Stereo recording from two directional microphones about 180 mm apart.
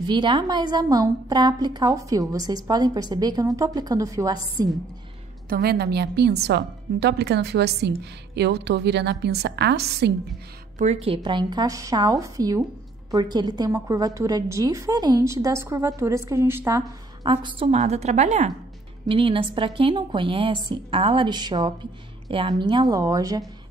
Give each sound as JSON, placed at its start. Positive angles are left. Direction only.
{"t": 0.0, "sound": "a woman's voice", "side_deg": -25}
{"t": 5.5, "sound": "a woman's voice", "side_deg": -60}
{"t": 10.8, "sound": "a woman's voice", "side_deg": -35}
{"t": 11.2, "sound": "a woman's voice", "side_deg": -25}